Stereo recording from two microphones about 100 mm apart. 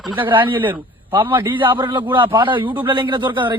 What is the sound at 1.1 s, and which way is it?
Speech, 55° right (ahead or behind).